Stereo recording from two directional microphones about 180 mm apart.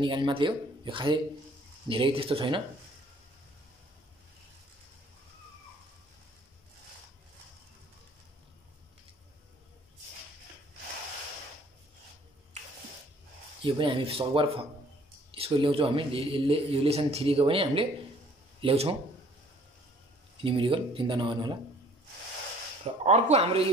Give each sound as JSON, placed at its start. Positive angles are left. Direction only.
{"t": 0.0, "sound": "speech", "side_deg": -25}
{"t": 13.6, "sound": "a man's voice", "side_deg": -30}
{"t": 20.3, "sound": "speech", "side_deg": -30}
{"t": 22.8, "sound": "a man's voice", "side_deg": -35}